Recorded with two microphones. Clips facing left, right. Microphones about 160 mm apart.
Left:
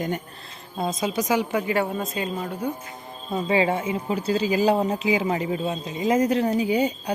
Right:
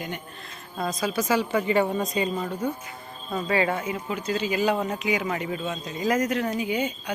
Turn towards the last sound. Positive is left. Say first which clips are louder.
# left 5 dB
turn(degrees=35)  # may be behind; listen again after turning